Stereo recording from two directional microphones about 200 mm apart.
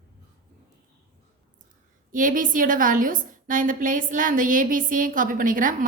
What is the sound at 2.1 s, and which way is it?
A woman's voice, 40° right (ahead or behind).